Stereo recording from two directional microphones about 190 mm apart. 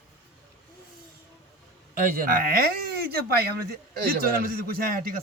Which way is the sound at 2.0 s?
50° right (ahead or behind).